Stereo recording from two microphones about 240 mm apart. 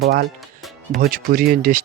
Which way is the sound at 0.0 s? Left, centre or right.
Right.